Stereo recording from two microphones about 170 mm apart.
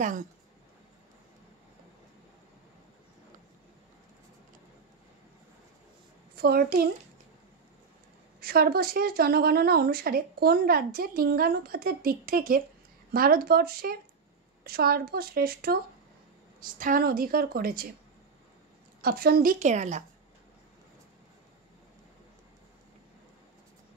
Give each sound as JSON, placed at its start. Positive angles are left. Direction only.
{"t": 6.3, "sound": "a child's voice", "side_deg": -65}
{"t": 8.4, "sound": "a woman's voice", "side_deg": -65}
{"t": 18.9, "sound": "a woman's voice", "side_deg": -60}